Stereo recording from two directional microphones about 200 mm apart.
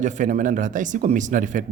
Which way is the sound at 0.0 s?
40° right (ahead or behind).